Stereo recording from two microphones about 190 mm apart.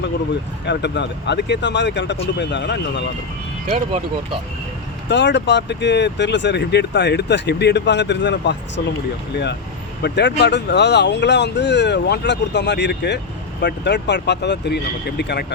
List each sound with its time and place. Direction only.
0.6 s speech: 65° left (ahead or behind)
3.7 s speech: 40° right (ahead or behind)
5.0 s speech: 65° left (ahead or behind)